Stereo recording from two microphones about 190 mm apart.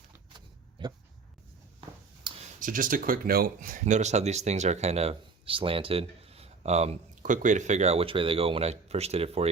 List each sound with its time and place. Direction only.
0.3 s power windows: 20° right (ahead or behind)
2.3 s a sound: 25° right (ahead or behind)
2.6 s speech: 45° right (ahead or behind)